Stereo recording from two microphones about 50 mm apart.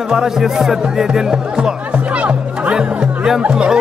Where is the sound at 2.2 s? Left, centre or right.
Right.